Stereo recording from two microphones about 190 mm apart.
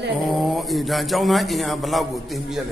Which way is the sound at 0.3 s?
Centre (ahead or behind).